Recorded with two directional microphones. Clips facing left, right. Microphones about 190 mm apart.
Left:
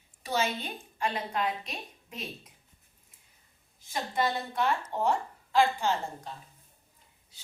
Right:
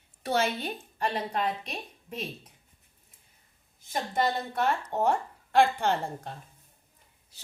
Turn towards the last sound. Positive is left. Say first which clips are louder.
# right 2 dB
turn(degrees=-60)  # may be behind; listen again after turning